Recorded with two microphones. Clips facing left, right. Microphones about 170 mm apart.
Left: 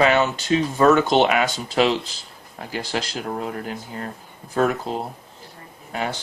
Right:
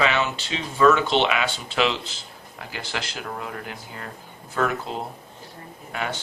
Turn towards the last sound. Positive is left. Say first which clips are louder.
# left 3 dB
turn(degrees=30)  # may be behind; listen again after turning